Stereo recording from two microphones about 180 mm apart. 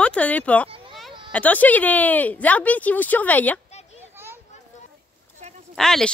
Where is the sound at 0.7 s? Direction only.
30° right (ahead or behind).